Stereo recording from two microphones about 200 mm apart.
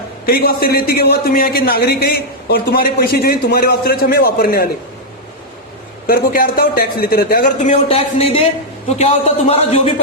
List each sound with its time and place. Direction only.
0.3 s a man's voice: 50° left (ahead or behind)
6.1 s a man's voice: 50° left (ahead or behind); by 9.9 s 30° left (ahead or behind)